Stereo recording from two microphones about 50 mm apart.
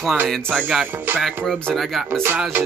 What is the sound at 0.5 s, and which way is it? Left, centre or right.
Speech, centre.